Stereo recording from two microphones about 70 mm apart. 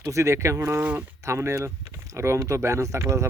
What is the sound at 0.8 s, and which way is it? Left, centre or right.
Speech, right.